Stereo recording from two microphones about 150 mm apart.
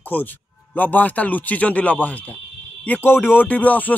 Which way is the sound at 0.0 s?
10° left (ahead or behind).